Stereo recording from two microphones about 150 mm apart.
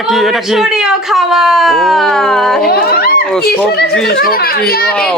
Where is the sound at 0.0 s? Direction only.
Centre (ahead or behind).